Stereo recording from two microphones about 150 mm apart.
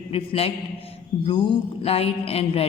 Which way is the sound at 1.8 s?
40° left (ahead or behind).